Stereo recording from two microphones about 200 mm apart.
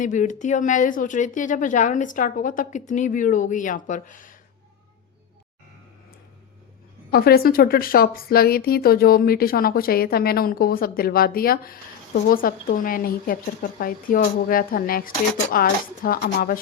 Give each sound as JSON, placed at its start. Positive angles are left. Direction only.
{"t": 0.0, "sound": "speech", "side_deg": 40}
{"t": 7.1, "sound": "a woman's voice", "side_deg": 50}